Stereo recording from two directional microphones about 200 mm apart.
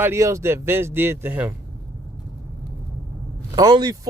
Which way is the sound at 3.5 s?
20° right (ahead or behind).